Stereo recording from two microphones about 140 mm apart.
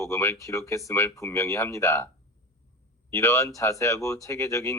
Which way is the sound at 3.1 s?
20° left (ahead or behind).